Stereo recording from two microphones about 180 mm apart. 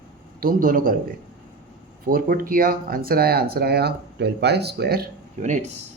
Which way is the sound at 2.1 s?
55° right (ahead or behind).